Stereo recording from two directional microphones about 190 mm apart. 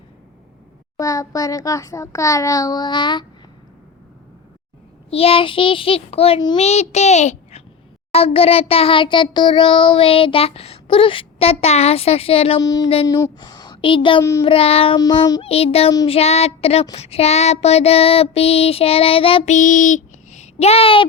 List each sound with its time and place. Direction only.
0.9 s a child's voice: 15° left (ahead or behind)
5.1 s child singing: 30° left (ahead or behind)
12.6 s child singing: 20° left (ahead or behind)
19.5 s child singing: 40° left (ahead or behind)